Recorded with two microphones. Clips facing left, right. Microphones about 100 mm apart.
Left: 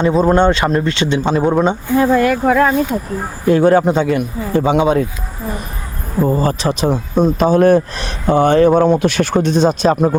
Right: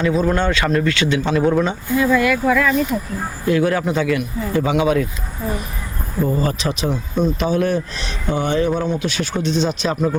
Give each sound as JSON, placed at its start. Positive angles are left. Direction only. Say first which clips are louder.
{"t": 0.0, "sound": "speech", "louder": "left 6 dB", "side_deg": 35}
{"t": 2.0, "sound": "speech", "louder": "left 3 dB", "side_deg": 45}
{"t": 3.5, "sound": "speech", "louder": "left 7 dB", "side_deg": 30}
{"t": 6.2, "sound": "speech", "louder": "left 5 dB", "side_deg": 35}